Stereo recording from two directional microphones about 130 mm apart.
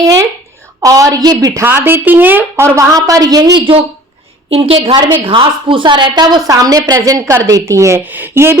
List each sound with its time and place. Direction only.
0.0 s a woman's voice: 25° right (ahead or behind)
1.6 s a woman's voice: 15° right (ahead or behind)
4.5 s a woman's voice: 45° right (ahead or behind); by 8.5 s 15° right (ahead or behind)